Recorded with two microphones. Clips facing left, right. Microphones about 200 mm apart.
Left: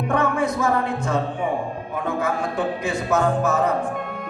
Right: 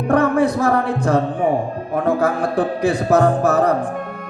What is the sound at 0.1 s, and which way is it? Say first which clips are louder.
Speech: right 7 dB; 35° right (ahead or behind).